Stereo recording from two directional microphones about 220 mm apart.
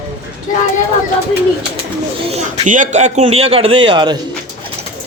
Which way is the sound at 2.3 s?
35° right (ahead or behind).